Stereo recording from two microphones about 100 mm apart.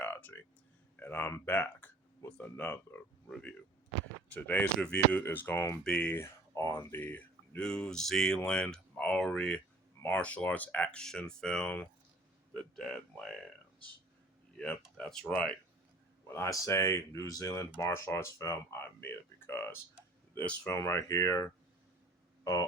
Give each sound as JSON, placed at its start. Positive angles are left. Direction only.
{"t": 0.0, "sound": "a sound", "side_deg": 15}
{"t": 0.9, "sound": "speech", "side_deg": 20}
{"t": 3.2, "sound": "speech", "side_deg": 5}
{"t": 4.3, "sound": "speech", "side_deg": 15}
{"t": 6.1, "sound": "speech", "side_deg": 25}
{"t": 7.6, "sound": "speech", "side_deg": 10}
{"t": 14.5, "sound": "speech", "side_deg": 10}
{"t": 16.3, "sound": "speech", "side_deg": 30}
{"t": 20.7, "sound": "speech", "side_deg": 30}